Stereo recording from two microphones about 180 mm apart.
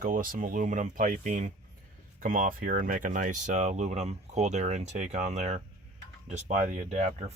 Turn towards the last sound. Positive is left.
turn(degrees=-40)  # may be behind; listen again after turning